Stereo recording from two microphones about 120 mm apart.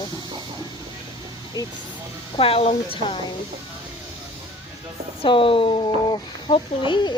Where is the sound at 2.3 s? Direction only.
50° left (ahead or behind).